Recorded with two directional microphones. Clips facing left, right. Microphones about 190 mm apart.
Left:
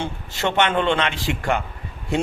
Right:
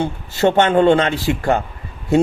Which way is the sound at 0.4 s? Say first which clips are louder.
Right 7 dB; 40° right (ahead or behind).